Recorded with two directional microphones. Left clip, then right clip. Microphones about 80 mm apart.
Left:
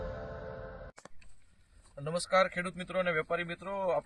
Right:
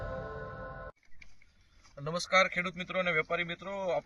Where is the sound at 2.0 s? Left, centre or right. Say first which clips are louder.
Right 1 dB; centre.